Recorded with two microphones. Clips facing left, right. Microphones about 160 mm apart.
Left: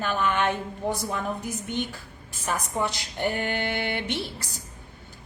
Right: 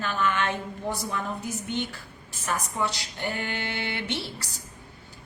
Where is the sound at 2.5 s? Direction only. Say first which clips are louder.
Left 1 dB; 15° left (ahead or behind).